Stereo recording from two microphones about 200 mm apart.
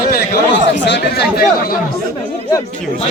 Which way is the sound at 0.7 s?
60° left (ahead or behind).